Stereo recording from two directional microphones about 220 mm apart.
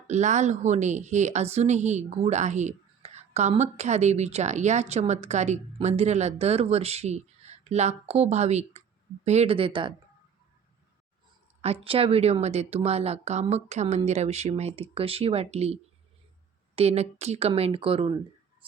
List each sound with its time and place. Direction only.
0.1 s a woman's voice: 30° right (ahead or behind)
11.6 s a woman's voice: 25° right (ahead or behind)